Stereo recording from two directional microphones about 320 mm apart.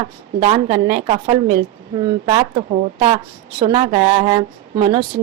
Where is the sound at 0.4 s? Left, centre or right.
Centre.